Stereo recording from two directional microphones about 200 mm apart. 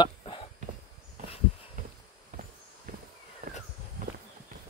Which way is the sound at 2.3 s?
40° right (ahead or behind).